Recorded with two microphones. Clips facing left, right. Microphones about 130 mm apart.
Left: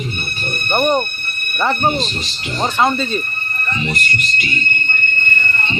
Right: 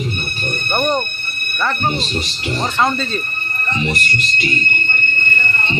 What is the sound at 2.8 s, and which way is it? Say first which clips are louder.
Speech: left 2 dB; 5° left (ahead or behind).